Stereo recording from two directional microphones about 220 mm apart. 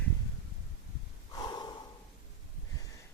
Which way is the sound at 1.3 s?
20° left (ahead or behind).